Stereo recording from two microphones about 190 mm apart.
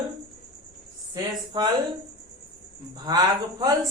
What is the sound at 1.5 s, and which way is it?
Speech, 20° right (ahead or behind).